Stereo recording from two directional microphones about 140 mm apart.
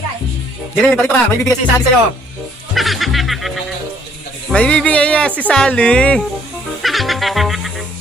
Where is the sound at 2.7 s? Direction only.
Centre (ahead or behind).